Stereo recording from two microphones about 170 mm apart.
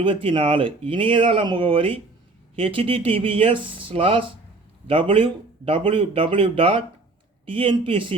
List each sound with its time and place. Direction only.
0.0 s speech: 30° right (ahead or behind)